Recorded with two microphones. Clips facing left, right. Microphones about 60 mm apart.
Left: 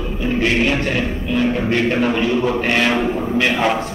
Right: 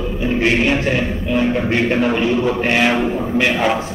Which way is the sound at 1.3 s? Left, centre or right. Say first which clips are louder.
Right 1 dB; centre.